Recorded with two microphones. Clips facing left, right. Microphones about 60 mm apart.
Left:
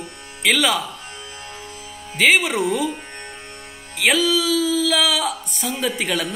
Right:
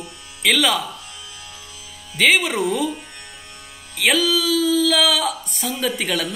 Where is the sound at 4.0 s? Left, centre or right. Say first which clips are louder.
Even; centre.